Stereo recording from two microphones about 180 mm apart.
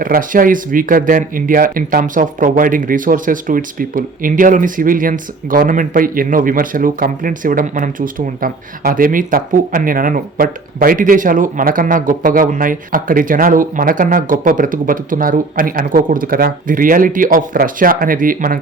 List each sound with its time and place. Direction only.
0.0 s speech: 50° right (ahead or behind)